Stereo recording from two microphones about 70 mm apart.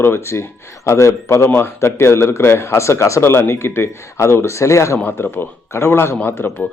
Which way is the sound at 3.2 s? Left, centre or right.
Left.